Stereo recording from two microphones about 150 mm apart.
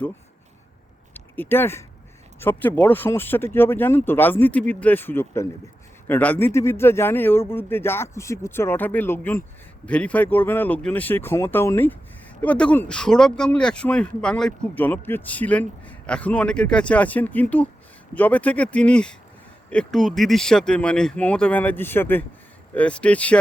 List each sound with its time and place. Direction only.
1.1 s speech: 15° left (ahead or behind)